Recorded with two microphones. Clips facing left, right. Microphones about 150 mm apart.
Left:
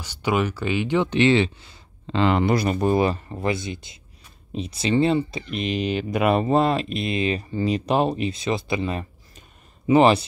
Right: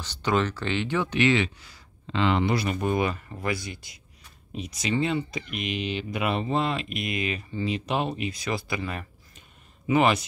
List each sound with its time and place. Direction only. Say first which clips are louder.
0.0 s speech: left 2 dB; 10° left (ahead or behind); by 2.1 s 30° left (ahead or behind)
2.1 s speech: left 4 dB; 45° left (ahead or behind); by 10.2 s 30° left (ahead or behind)